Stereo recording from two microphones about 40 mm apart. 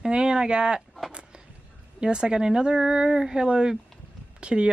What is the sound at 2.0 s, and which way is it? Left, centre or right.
Speech, right.